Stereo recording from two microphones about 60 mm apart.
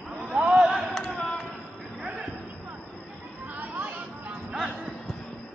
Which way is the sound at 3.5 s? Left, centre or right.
Right.